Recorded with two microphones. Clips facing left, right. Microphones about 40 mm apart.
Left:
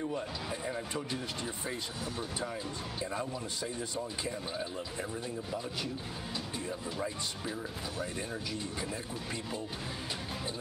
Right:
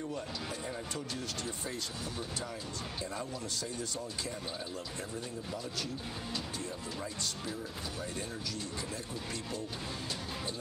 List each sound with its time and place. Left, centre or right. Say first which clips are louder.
0.0 s speech: left 3 dB; centre